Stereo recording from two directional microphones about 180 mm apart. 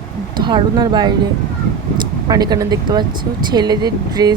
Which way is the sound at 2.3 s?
20° right (ahead or behind).